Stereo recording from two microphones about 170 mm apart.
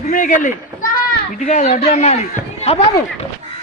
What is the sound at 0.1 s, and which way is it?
A man's voice, 50° left (ahead or behind).